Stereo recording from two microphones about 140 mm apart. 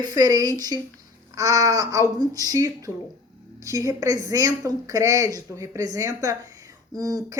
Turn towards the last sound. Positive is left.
turn(degrees=-25)  # may be behind; listen again after turning